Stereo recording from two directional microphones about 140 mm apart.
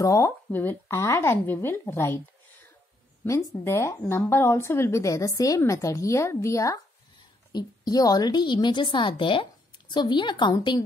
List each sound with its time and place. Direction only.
0.0 s speech: 20° left (ahead or behind)
3.3 s a woman's voice: 20° left (ahead or behind)